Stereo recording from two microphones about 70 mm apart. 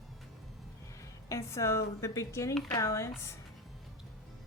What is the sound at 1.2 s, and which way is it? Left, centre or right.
Speech, left.